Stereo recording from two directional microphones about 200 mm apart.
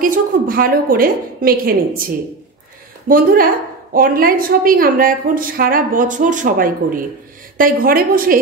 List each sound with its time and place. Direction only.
0.0 s a woman's voice: 45° right (ahead or behind)